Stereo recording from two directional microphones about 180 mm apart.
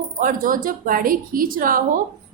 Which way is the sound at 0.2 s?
50° right (ahead or behind).